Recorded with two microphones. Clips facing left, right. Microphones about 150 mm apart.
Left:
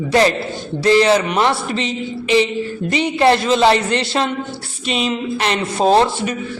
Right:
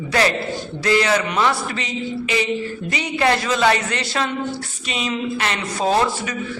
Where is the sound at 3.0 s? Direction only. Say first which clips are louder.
Left 5 dB; 25° left (ahead or behind).